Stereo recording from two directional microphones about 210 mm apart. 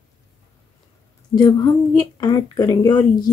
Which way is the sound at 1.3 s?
20° left (ahead or behind).